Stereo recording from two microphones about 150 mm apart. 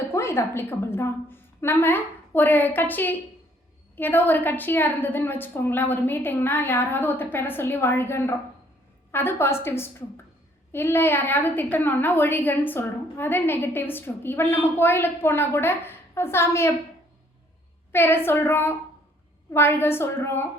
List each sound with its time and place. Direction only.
0.1 s a woman's voice: 15° left (ahead or behind)
17.9 s a woman's voice: 15° left (ahead or behind)